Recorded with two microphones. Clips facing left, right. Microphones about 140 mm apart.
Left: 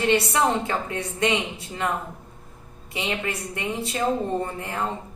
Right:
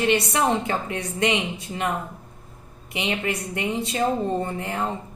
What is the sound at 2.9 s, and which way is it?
Speech, 20° right (ahead or behind).